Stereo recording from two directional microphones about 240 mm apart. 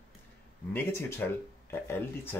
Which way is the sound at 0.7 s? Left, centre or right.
Centre.